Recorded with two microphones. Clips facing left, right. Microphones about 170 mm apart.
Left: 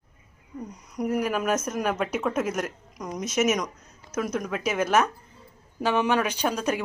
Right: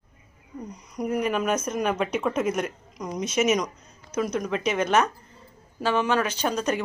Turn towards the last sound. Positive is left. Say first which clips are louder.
# right 1 dB
turn(degrees=10)  # may be behind; listen again after turning